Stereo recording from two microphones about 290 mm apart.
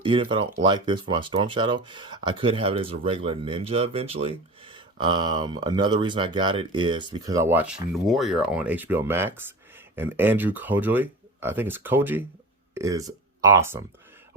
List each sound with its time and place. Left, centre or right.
0.0 s speech: centre